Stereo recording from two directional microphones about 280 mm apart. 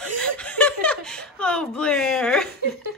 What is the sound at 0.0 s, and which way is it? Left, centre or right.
Chuckle, centre.